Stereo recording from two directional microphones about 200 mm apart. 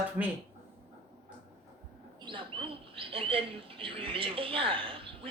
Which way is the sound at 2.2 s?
25° right (ahead or behind).